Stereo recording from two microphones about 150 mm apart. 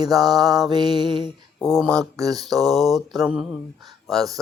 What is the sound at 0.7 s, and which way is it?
Music, 30° right (ahead or behind).